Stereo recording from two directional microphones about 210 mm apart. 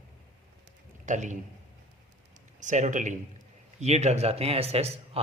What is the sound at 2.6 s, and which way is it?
A man's voice, 35° right (ahead or behind).